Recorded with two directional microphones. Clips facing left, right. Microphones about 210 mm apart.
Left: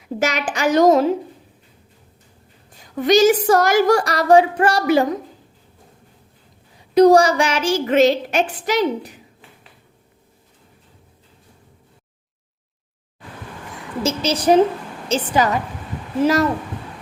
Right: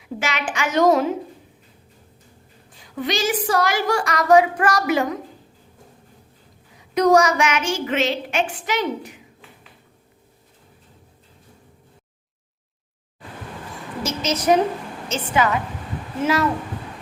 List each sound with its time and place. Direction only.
0.2 s a woman's voice: 40° left (ahead or behind)
3.0 s a woman's voice: 40° left (ahead or behind)
6.7 s a woman's voice: 30° left (ahead or behind)
14.0 s a woman's voice: 30° left (ahead or behind)